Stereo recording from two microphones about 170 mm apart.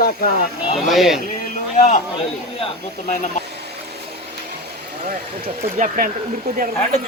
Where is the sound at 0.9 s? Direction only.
Centre (ahead or behind).